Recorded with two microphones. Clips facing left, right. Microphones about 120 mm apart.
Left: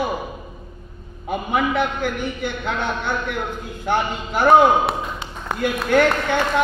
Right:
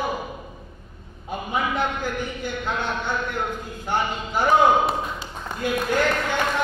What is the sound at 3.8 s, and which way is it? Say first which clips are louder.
A man's voice: left 4 dB; 65° left (ahead or behind).